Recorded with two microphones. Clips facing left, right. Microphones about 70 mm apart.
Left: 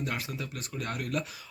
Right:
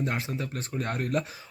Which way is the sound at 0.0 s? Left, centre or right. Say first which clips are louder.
Right 4 dB; right.